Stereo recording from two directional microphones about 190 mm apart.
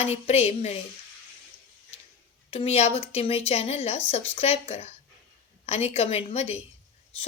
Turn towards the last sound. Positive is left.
turn(degrees=35)  # may be behind; listen again after turning